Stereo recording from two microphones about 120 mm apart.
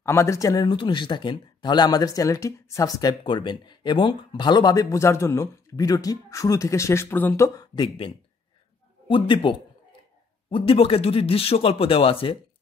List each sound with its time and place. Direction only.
0.0 s speech: 20° left (ahead or behind)
0.7 s speech: 40° left (ahead or behind); by 7.6 s 25° left (ahead or behind)
7.7 s speech: 40° left (ahead or behind)
9.1 s speech: 45° left (ahead or behind)